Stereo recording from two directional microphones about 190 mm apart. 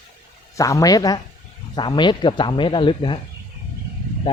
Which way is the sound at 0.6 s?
15° left (ahead or behind).